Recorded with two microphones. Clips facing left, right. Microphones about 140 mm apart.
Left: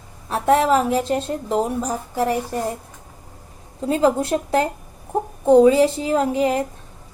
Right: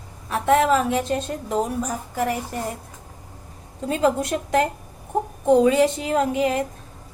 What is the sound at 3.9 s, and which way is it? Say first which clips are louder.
A woman's voice: left 3 dB; 30° left (ahead or behind).